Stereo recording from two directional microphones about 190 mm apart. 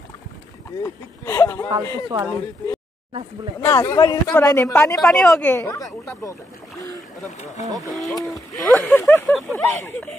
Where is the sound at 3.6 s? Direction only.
15° left (ahead or behind).